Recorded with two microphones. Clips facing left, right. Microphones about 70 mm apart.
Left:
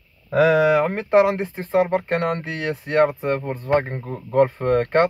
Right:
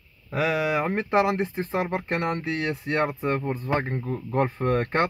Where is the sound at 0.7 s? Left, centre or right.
Left.